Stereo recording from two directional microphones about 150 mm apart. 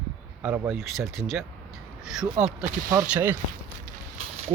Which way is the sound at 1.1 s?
Centre (ahead or behind).